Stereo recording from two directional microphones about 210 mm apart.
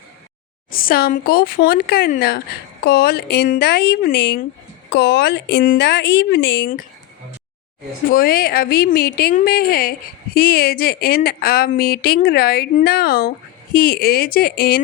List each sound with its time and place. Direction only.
0.7 s speech: 45° left (ahead or behind)
8.1 s speech: 45° left (ahead or behind)